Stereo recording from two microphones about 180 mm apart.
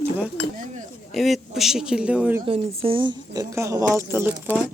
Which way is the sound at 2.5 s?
30° right (ahead or behind).